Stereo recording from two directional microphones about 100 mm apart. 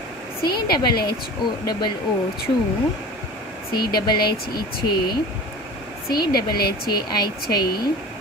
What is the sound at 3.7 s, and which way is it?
Speech, 45° left (ahead or behind).